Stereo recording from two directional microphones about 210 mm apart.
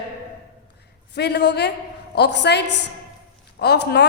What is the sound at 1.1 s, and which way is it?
A woman's voice, 50° left (ahead or behind).